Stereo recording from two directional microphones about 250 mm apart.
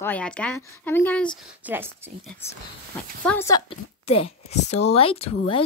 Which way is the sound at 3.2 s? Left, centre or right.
Centre.